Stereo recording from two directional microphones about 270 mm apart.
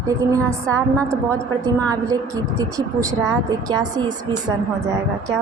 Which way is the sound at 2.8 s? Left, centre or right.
Centre.